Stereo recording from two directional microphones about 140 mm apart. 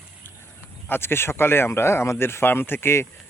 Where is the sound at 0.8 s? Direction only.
15° left (ahead or behind).